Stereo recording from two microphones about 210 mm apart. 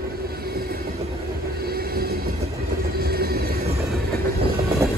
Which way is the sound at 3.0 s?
45° right (ahead or behind).